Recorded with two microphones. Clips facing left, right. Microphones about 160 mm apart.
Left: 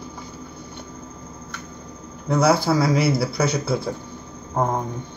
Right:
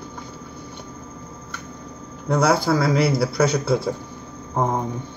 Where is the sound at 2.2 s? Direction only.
5° left (ahead or behind).